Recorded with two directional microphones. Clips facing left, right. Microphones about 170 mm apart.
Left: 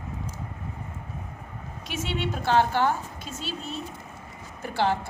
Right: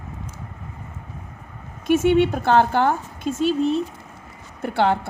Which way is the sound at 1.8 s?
50° right (ahead or behind).